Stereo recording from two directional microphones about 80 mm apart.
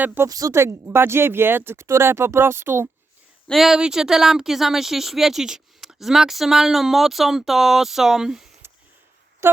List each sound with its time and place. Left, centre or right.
0.0 s speech: right
0.3 s speech: right
0.5 s speech: right
3.4 s speech: centre
9.4 s a sound: right